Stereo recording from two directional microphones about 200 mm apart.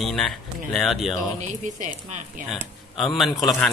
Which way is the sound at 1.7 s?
40° right (ahead or behind).